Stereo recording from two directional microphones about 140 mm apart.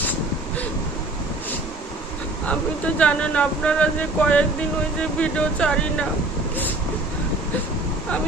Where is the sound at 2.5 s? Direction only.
10° left (ahead or behind).